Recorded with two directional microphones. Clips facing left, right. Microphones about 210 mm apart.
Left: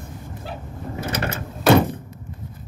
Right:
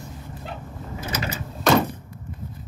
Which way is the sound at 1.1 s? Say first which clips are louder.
Left 2 dB; 55° left (ahead or behind).